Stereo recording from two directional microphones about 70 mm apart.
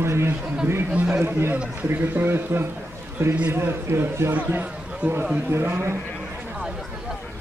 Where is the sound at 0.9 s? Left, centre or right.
Right.